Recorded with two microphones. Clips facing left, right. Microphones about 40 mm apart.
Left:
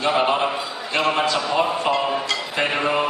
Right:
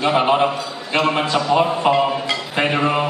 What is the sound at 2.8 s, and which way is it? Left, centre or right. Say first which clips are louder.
Speech: right 2 dB; centre.